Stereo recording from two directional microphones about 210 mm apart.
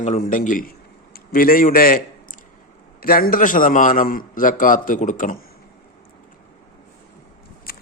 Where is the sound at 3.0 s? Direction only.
45° left (ahead or behind).